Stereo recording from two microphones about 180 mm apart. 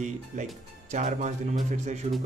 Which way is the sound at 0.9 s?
40° right (ahead or behind).